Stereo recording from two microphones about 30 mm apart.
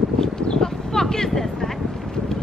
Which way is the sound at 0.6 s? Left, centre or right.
Centre.